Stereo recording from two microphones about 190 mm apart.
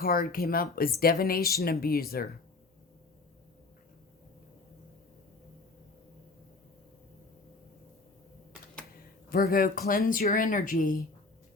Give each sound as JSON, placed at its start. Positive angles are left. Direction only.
{"t": 0.0, "sound": "speech", "side_deg": 50}
{"t": 9.3, "sound": "speech", "side_deg": 50}